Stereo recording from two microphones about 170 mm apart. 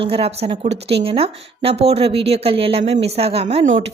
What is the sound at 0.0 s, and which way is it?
A woman's voice, 35° right (ahead or behind).